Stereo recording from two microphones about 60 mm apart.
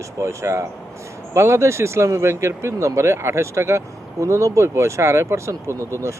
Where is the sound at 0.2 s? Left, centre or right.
Right.